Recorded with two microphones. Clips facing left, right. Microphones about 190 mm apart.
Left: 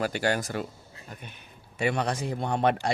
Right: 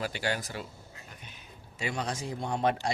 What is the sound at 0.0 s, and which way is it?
Speech, 50° left (ahead or behind).